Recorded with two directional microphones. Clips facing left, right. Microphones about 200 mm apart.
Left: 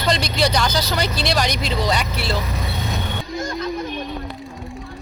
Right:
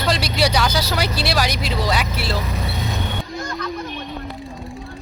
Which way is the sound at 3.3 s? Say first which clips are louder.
Left 6 dB; 25° left (ahead or behind).